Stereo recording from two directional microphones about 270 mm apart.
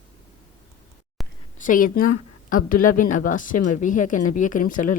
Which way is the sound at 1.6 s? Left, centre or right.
Left.